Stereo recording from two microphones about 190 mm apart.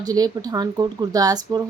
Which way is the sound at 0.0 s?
20° right (ahead or behind).